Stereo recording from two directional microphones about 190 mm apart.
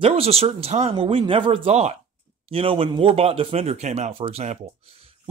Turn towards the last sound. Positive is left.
turn(degrees=-35)  # may be behind; listen again after turning